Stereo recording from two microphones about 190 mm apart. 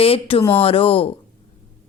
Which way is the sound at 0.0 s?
30° left (ahead or behind).